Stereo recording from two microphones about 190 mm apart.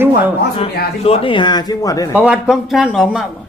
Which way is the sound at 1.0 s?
30° left (ahead or behind).